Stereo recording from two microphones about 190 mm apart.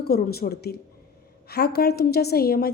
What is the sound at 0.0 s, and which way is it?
A woman's voice, 55° left (ahead or behind).